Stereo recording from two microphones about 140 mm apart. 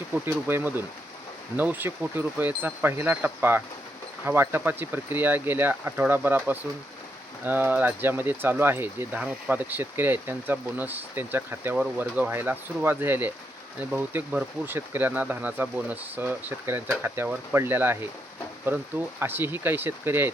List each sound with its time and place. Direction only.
0.1 s speech: 15° right (ahead or behind)